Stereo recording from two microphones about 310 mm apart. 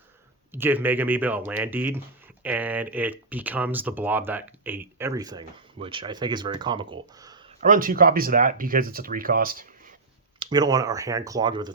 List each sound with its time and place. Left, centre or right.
0.5 s speech: centre
7.2 s a sound: centre
7.6 s speech: right
10.4 s speech: centre